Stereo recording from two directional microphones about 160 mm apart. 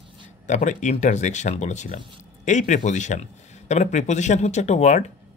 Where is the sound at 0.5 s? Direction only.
50° left (ahead or behind).